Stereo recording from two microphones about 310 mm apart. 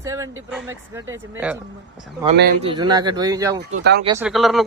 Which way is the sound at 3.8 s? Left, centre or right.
Right.